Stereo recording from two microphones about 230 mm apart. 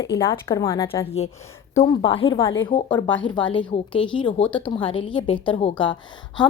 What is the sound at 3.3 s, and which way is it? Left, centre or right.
Speech, left.